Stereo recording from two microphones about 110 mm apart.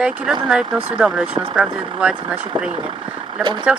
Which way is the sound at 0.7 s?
55° right (ahead or behind).